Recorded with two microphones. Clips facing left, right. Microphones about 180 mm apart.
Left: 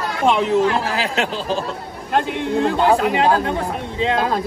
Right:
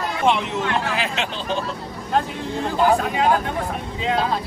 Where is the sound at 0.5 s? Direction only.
35° left (ahead or behind).